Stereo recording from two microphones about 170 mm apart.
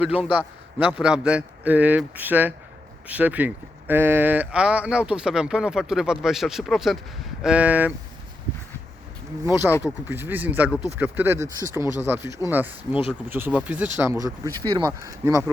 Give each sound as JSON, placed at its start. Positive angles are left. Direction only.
{"t": 0.0, "sound": "a man's voice", "side_deg": -10}
{"t": 9.4, "sound": "a man's voice", "side_deg": -15}